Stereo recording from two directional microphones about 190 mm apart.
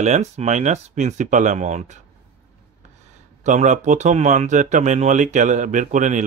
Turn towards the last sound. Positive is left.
turn(degrees=-40)  # may be behind; listen again after turning